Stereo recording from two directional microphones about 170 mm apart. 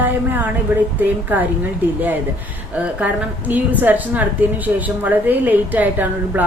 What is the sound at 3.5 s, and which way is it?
A woman's voice, 10° right (ahead or behind).